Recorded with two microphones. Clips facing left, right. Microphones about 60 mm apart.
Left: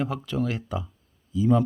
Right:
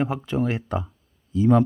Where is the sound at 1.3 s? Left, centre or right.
Right.